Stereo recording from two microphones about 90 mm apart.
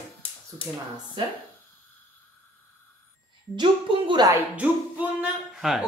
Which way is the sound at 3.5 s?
55° right (ahead or behind).